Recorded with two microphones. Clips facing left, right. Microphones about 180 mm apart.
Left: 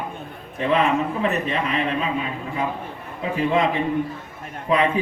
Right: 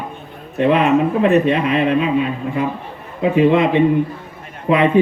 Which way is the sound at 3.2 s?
65° right (ahead or behind).